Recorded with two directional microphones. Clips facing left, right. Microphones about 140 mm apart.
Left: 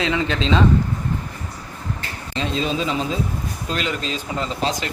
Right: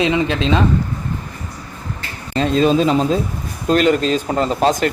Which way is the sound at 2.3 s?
50° right (ahead or behind).